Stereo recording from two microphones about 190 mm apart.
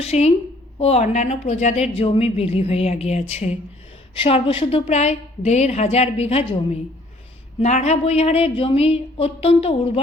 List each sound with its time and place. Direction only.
0.0 s a woman's voice: 35° left (ahead or behind)
7.6 s a woman's voice: 35° left (ahead or behind)